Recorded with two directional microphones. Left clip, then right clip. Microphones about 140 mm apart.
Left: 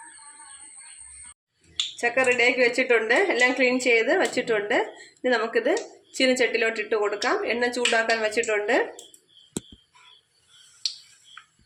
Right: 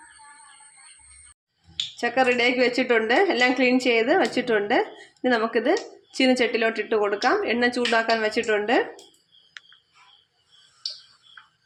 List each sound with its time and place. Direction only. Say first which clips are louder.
2.0 s a woman's voice: even; 90° right